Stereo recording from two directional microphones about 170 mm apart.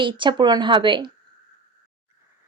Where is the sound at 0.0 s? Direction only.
30° right (ahead or behind).